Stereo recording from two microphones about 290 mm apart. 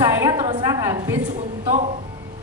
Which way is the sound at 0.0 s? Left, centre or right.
Centre.